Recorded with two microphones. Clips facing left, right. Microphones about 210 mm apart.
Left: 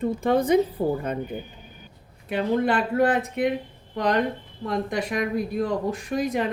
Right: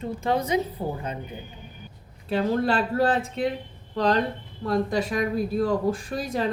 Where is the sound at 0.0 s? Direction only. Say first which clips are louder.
Left 4 dB; 55° left (ahead or behind).